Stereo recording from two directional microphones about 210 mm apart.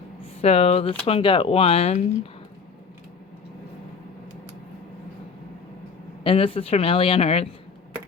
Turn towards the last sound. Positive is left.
turn(degrees=30)  # may be behind; listen again after turning